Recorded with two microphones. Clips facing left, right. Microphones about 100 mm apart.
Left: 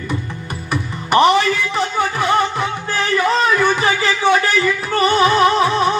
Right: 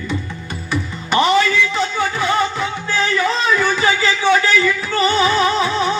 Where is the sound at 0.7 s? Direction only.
55° left (ahead or behind).